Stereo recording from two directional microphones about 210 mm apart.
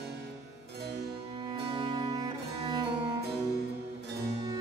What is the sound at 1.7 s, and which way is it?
Cello, 20° right (ahead or behind).